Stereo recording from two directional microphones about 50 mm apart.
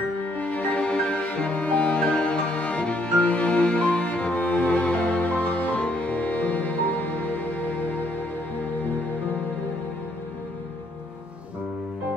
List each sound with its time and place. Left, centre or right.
0.4 s music: left